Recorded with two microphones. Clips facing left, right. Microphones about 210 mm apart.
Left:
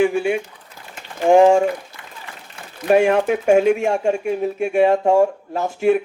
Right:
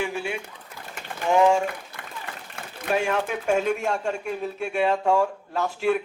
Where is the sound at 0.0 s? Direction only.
50° left (ahead or behind).